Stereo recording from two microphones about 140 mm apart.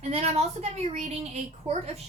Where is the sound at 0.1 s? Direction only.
50° right (ahead or behind).